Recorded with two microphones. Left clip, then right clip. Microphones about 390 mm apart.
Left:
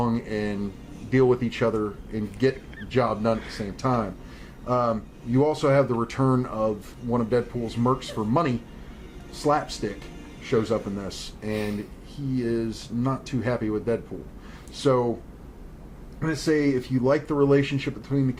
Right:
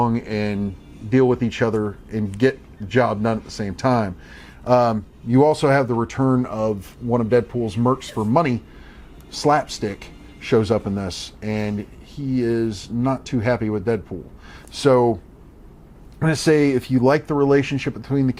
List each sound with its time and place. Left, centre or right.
0.0 s speech: right
5.9 s speech: right
10.4 s speech: right
16.2 s speech: right